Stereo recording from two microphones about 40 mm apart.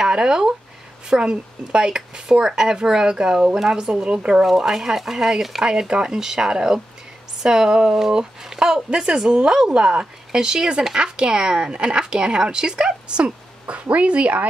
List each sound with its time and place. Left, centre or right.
0.0 s speech: right
4.5 s speech: centre
5.7 s speech: centre
11.0 s speech: right